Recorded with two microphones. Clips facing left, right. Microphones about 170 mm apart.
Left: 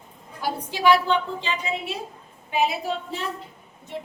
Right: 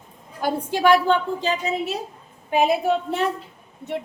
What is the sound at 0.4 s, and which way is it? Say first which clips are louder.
A woman's voice: right 2 dB; 50° right (ahead or behind).